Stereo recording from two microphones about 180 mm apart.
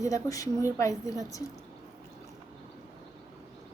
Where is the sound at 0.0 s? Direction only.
20° left (ahead or behind).